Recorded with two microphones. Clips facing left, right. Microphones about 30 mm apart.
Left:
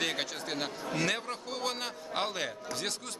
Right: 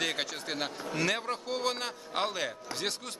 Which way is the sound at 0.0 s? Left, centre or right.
Centre.